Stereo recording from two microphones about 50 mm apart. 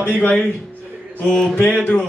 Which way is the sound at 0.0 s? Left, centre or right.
Left.